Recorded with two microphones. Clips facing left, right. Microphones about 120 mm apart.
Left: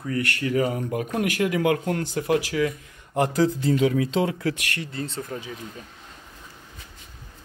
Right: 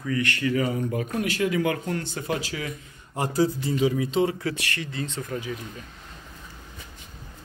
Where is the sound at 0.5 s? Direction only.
55° left (ahead or behind).